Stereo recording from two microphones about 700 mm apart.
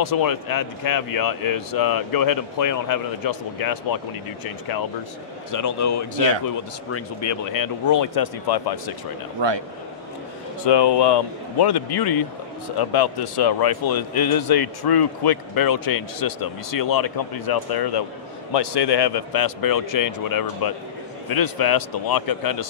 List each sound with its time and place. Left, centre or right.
0.0 s speech: left
5.5 s speech: left
10.6 s speech: left